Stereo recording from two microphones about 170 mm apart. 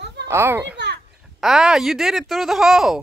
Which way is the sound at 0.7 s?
85° right.